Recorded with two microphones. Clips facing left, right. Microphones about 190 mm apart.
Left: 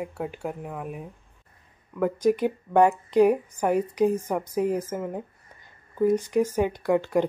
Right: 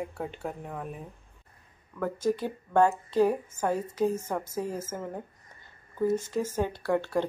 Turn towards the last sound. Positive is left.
turn(degrees=15)  # may be behind; listen again after turning